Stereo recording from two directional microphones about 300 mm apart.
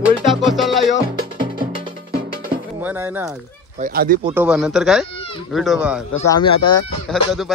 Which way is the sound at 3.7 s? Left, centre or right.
Right.